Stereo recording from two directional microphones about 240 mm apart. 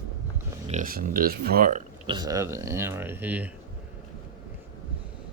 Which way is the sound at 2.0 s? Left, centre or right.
Centre.